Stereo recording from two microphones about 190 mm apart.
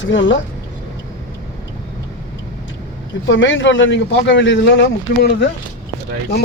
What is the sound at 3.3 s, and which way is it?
Speech, 80° left.